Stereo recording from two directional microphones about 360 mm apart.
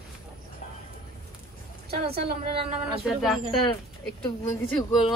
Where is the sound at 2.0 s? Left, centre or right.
Right.